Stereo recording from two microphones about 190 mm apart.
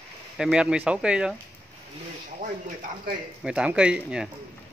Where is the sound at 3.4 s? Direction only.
5° right (ahead or behind).